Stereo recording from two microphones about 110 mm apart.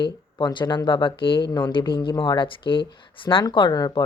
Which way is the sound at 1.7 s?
50° left (ahead or behind).